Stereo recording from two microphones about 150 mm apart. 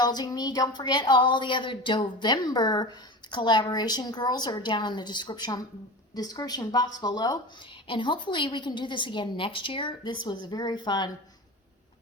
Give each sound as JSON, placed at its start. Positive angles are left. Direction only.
{"t": 0.0, "sound": "a woman's voice", "side_deg": 25}